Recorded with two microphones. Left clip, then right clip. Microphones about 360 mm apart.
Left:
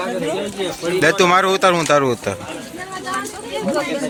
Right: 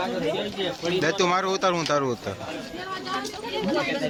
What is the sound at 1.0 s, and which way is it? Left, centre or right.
Speech, right.